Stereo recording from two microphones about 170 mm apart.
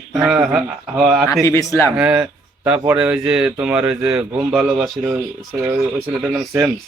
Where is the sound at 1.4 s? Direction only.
15° left (ahead or behind).